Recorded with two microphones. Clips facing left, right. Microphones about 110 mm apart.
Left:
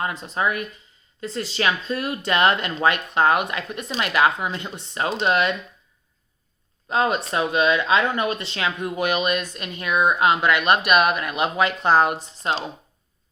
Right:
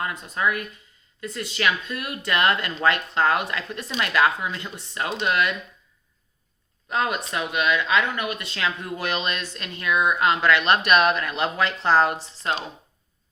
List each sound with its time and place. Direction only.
0.0 s speech: 25° left (ahead or behind)
6.8 s speech: 25° left (ahead or behind)